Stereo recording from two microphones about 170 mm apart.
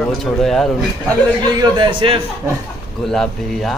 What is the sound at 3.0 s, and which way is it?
Speech, centre (ahead or behind).